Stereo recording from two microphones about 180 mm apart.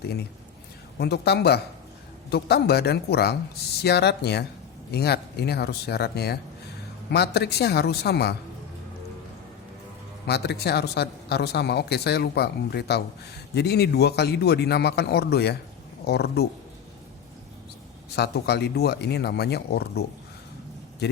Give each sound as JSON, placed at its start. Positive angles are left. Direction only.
{"t": 0.9, "sound": "speech", "side_deg": 65}
{"t": 10.2, "sound": "speech", "side_deg": 65}
{"t": 18.2, "sound": "speech", "side_deg": 65}